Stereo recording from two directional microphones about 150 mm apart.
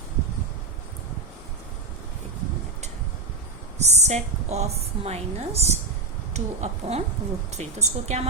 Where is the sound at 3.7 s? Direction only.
50° right (ahead or behind).